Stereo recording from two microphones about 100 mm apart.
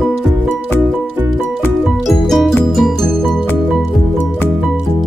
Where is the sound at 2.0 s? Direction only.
Centre (ahead or behind).